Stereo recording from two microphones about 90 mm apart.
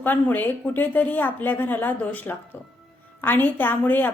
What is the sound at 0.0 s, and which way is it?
A woman's voice, 20° left (ahead or behind).